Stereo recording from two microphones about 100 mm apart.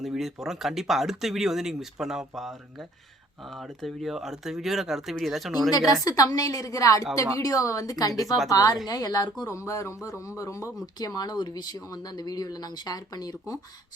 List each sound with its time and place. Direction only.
0.0 s speech: centre (ahead or behind)
5.7 s speech: 35° left (ahead or behind)
9.5 s speech: 30° left (ahead or behind)